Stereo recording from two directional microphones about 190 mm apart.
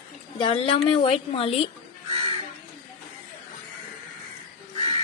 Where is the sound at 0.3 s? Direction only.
30° left (ahead or behind).